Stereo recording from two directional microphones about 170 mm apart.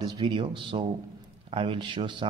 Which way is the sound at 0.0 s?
25° right (ahead or behind).